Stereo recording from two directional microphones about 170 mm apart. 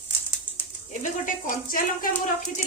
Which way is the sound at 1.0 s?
50° left (ahead or behind).